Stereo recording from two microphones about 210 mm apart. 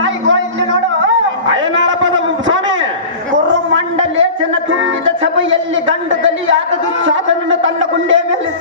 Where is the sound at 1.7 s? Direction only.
60° right (ahead or behind).